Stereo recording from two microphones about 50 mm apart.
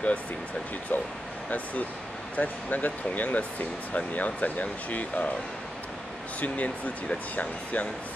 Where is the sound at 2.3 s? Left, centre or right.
Left.